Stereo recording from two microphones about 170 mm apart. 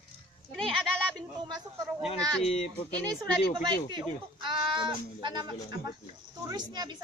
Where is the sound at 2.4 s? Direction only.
40° left (ahead or behind).